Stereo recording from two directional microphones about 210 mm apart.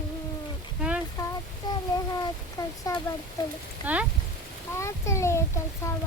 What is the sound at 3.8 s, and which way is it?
Speech, 5° right (ahead or behind).